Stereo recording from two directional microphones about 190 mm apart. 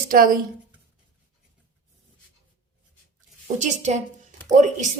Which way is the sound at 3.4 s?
40° right (ahead or behind).